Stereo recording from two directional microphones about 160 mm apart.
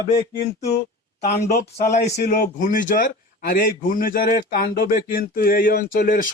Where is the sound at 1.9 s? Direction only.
50° left (ahead or behind).